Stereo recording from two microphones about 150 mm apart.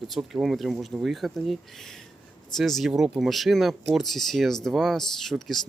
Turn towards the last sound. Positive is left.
turn(degrees=0)  # may be behind; listen again after turning